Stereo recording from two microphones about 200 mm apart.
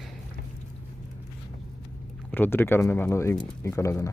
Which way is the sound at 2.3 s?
10° left (ahead or behind).